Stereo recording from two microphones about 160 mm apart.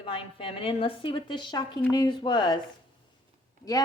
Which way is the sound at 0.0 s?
35° left (ahead or behind).